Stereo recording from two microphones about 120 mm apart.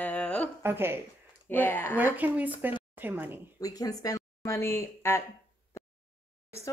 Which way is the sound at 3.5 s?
30° left (ahead or behind).